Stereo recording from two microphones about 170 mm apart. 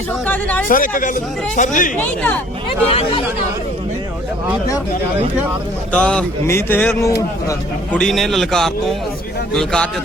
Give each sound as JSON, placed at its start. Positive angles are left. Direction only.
{"t": 0.3, "sound": "speech", "side_deg": 10}
{"t": 0.7, "sound": "speech", "side_deg": 55}
{"t": 2.6, "sound": "speech", "side_deg": 35}
{"t": 5.9, "sound": "a man's voice", "side_deg": 5}